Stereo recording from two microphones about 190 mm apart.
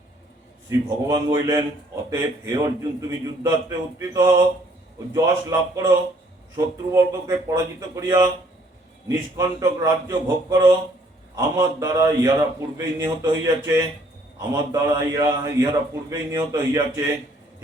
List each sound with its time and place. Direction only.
0.7 s a man's voice: 20° right (ahead or behind)